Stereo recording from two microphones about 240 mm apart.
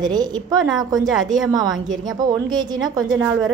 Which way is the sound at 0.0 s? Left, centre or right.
Centre.